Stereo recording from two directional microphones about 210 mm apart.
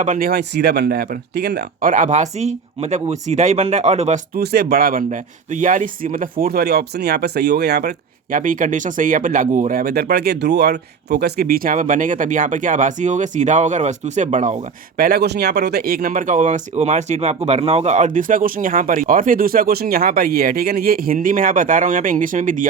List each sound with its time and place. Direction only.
0.0 s speech: 40° right (ahead or behind)
4.4 s speech: 50° right (ahead or behind)